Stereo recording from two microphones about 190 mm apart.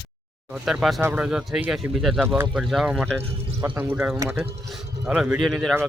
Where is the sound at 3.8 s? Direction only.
10° right (ahead or behind).